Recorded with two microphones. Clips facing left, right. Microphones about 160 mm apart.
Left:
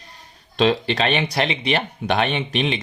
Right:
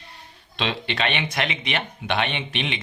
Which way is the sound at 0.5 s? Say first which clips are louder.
Left 9 dB; 40° left (ahead or behind).